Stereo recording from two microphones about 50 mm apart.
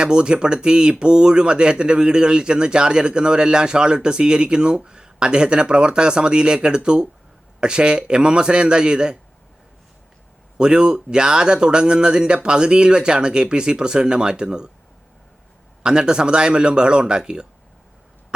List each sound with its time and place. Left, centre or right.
0.0 s a man's voice: centre
10.6 s speech: centre
15.8 s speech: centre